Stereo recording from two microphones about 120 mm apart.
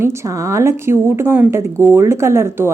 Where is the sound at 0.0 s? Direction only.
25° right (ahead or behind).